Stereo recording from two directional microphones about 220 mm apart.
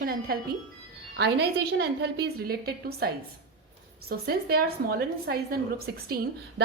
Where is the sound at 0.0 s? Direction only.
45° right (ahead or behind).